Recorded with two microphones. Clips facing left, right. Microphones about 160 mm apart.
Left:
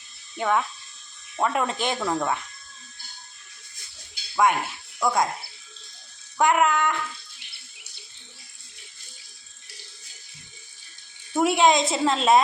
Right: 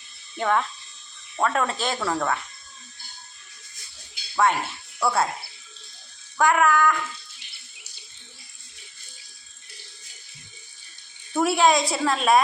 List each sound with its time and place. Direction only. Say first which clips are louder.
0.3 s a woman's voice: right 1 dB; 10° left (ahead or behind)
4.4 s speech: left 1 dB; 10° left (ahead or behind)
6.3 s a woman's voice: right 1 dB; 20° left (ahead or behind)
11.3 s a woman's voice: even; 20° left (ahead or behind)